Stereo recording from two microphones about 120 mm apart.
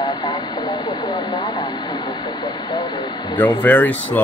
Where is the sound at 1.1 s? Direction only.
35° left (ahead or behind).